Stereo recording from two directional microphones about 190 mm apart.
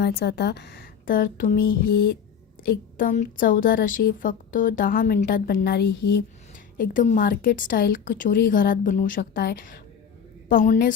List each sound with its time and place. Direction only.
0.0 s a woman's voice: 60° left (ahead or behind)
6.7 s a woman's voice: 45° left (ahead or behind)